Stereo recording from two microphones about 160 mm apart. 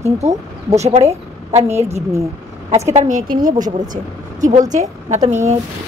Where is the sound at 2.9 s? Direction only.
50° right (ahead or behind).